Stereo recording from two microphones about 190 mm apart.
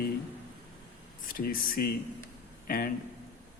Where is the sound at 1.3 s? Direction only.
50° left (ahead or behind).